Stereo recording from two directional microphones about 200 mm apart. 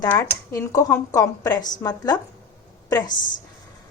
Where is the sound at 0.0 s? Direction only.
15° left (ahead or behind).